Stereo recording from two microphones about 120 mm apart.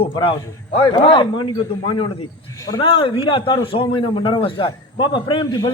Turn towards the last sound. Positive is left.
turn(degrees=35)  # may be behind; listen again after turning